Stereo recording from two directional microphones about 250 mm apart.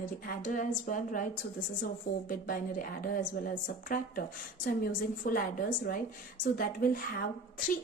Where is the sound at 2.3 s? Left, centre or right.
Left.